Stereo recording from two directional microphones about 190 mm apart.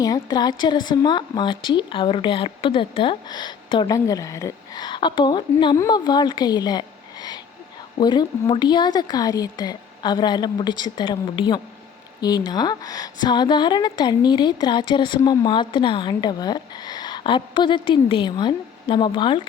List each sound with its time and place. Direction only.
0.0 s speech: 20° left (ahead or behind)